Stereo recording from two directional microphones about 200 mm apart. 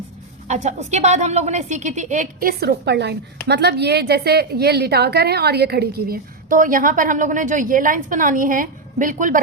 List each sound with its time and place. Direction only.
0.4 s a woman's voice: 35° right (ahead or behind)